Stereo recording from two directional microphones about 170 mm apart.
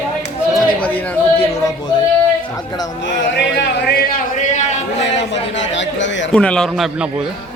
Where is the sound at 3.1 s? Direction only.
90° left; by 4.2 s 70° left (ahead or behind).